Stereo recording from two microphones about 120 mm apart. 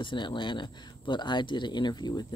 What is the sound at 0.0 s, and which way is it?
Speech, 40° left (ahead or behind).